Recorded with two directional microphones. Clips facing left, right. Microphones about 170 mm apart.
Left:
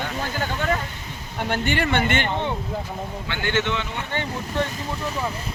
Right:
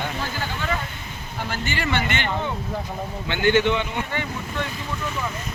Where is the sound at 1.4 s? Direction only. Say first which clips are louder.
Left 4 dB; 60° left (ahead or behind).